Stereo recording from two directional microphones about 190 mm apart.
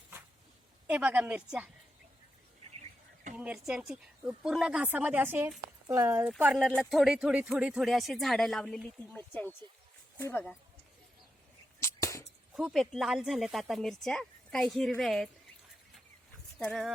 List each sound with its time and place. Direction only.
0.9 s speech: 5° right (ahead or behind)
3.3 s speech: 5° right (ahead or behind)
11.8 s a sound: 15° left (ahead or behind)
12.5 s speech: centre (ahead or behind)
16.6 s speech: centre (ahead or behind)